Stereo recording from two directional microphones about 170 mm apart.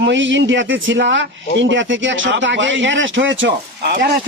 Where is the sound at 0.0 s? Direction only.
90° right.